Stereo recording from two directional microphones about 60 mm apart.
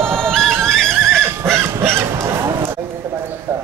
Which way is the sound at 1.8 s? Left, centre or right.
Right.